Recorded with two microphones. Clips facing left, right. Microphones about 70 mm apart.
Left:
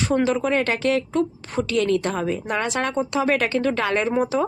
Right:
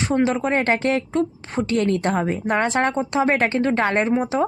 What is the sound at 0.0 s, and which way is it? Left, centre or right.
A woman's voice, right.